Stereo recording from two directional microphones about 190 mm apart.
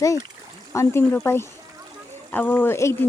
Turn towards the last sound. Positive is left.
turn(degrees=15)  # may be behind; listen again after turning